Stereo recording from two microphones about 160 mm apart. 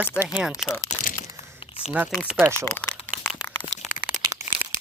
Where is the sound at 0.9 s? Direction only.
50° left (ahead or behind).